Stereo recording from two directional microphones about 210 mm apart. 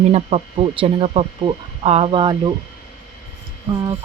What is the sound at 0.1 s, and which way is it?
Speech, 30° right (ahead or behind).